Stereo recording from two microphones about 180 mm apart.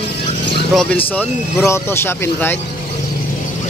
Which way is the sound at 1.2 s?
15° left (ahead or behind).